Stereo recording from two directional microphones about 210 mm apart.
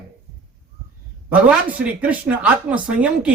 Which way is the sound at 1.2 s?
5° right (ahead or behind).